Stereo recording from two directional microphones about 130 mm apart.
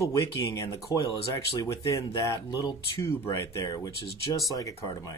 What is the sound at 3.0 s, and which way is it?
Speech, 20° left (ahead or behind).